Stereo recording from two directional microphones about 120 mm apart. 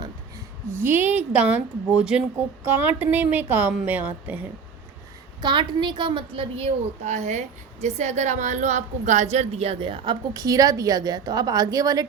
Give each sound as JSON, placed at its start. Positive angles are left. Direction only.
{"t": 0.7, "sound": "a woman's voice", "side_deg": -20}
{"t": 5.4, "sound": "a woman's voice", "side_deg": -40}
{"t": 7.0, "sound": "a woman's voice", "side_deg": -75}